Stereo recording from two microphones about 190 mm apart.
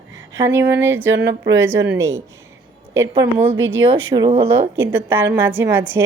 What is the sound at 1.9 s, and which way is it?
Speech, 15° right (ahead or behind).